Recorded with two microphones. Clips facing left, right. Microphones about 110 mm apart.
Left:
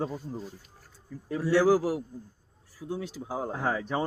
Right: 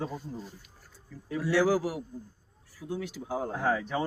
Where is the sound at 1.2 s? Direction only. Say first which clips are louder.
Left 3 dB; 40° left (ahead or behind).